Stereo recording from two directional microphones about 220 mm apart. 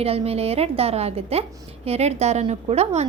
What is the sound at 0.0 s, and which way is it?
A woman's voice, 25° right (ahead or behind).